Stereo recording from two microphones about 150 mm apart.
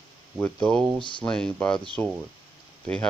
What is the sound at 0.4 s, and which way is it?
Speech, 5° left (ahead or behind).